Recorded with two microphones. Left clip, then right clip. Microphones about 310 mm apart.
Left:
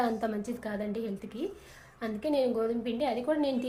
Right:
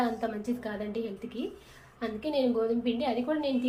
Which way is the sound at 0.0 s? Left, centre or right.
Left.